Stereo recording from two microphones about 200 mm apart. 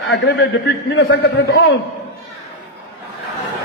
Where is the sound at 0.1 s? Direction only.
60° left (ahead or behind).